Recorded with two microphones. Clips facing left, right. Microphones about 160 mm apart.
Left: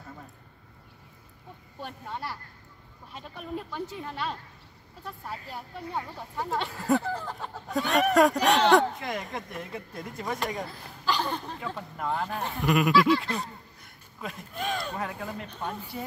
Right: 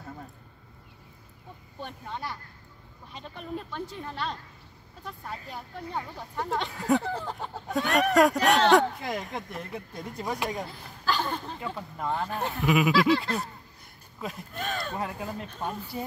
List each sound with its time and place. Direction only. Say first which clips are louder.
1.8 s speech: even; 5° left (ahead or behind)